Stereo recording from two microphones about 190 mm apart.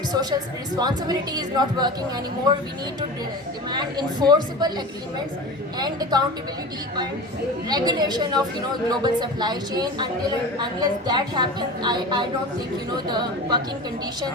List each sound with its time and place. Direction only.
0.1 s a woman's voice: 20° right (ahead or behind)
3.7 s a woman's voice: 20° right (ahead or behind)
5.8 s a woman's voice: 20° right (ahead or behind)
7.7 s a woman's voice: 20° right (ahead or behind)